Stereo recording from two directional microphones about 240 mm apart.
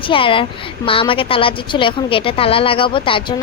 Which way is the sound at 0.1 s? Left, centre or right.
Left.